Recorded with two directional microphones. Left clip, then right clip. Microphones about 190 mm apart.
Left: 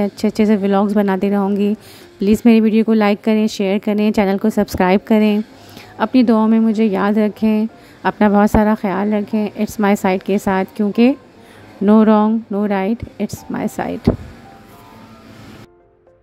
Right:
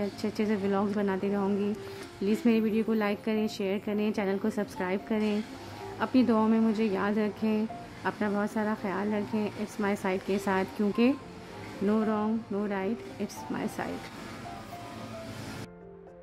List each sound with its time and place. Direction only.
0.0 s speech: 40° left (ahead or behind)